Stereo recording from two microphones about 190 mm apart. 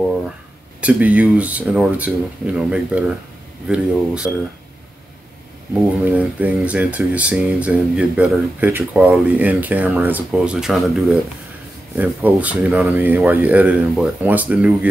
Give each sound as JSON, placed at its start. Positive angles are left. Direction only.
{"t": 0.7, "sound": "speech", "side_deg": -5}
{"t": 6.0, "sound": "speech", "side_deg": -10}